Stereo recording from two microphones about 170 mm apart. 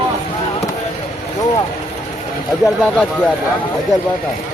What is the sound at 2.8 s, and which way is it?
Speech, 10° left (ahead or behind).